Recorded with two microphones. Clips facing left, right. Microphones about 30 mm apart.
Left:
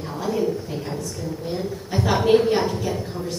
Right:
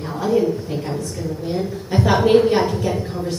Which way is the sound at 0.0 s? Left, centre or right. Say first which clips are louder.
Right 5 dB; centre.